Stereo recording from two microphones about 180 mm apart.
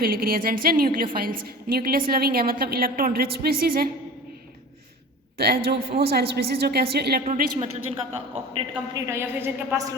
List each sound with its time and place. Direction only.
0.0 s a woman's voice: 55° right (ahead or behind)
5.4 s a woman's voice: 65° right (ahead or behind)
8.9 s a woman's voice: 20° right (ahead or behind)